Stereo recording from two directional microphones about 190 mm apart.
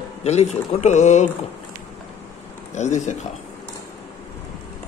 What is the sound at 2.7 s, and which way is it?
Speech, 40° left (ahead or behind).